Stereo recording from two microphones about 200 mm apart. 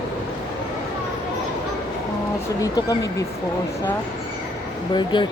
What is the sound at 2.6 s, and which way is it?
Speech, 15° left (ahead or behind).